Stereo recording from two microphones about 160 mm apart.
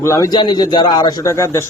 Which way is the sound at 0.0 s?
20° left (ahead or behind).